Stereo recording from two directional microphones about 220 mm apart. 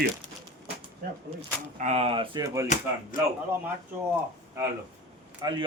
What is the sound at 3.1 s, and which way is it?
Speech, 35° left (ahead or behind).